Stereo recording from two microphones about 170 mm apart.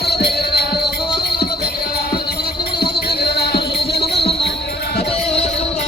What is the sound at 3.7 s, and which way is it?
Music, 30° left (ahead or behind).